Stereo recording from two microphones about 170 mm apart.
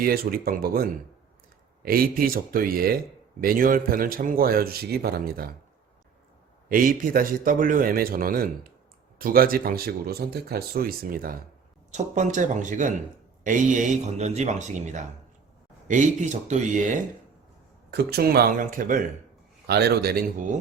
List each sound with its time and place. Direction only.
0.0 s speech: 60° right (ahead or behind)
6.7 s speech: 55° right (ahead or behind)
11.9 s speech: 45° right (ahead or behind)
17.9 s speech: 65° right (ahead or behind)
19.6 s speech: 75° right (ahead or behind)